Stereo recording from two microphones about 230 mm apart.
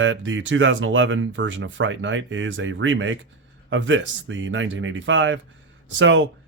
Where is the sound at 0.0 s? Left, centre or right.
Right.